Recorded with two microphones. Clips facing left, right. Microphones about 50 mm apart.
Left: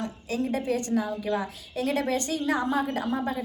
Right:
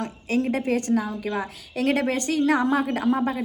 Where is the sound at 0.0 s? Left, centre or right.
Right.